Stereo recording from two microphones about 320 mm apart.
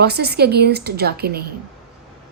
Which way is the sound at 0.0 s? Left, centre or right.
Right.